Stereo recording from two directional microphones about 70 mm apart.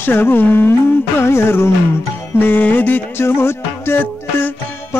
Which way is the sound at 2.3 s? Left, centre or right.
Left.